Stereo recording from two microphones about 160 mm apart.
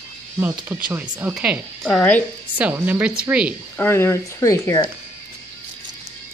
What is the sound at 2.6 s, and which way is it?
Speech, 10° right (ahead or behind).